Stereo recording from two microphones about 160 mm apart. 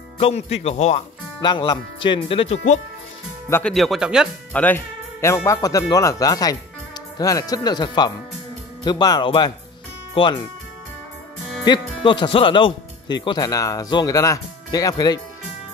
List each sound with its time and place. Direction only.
0.2 s speech: 40° left (ahead or behind)
1.4 s speech: 30° left (ahead or behind); by 2.8 s 45° left (ahead or behind)
3.4 s speech: 15° left (ahead or behind)
3.7 s speech: centre (ahead or behind)
4.5 s speech: 10° left (ahead or behind); by 10.4 s 30° left (ahead or behind)
11.6 s speech: 30° left (ahead or behind)